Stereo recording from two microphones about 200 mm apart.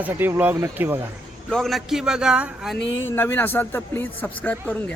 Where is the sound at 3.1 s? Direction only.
10° left (ahead or behind).